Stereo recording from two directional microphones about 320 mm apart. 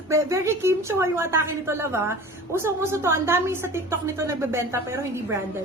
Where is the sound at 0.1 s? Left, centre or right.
Centre.